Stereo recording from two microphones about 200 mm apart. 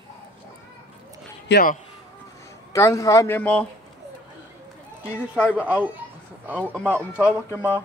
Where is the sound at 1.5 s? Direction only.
50° left (ahead or behind).